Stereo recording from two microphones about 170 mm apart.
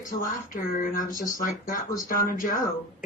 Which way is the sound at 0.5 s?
50° left (ahead or behind).